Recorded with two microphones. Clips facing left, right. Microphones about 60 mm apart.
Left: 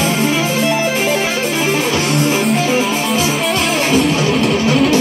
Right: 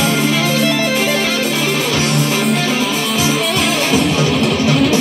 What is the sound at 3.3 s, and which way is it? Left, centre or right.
Music, centre.